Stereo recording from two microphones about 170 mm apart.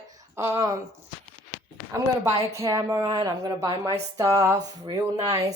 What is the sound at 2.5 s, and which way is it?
A woman's voice, 20° right (ahead or behind).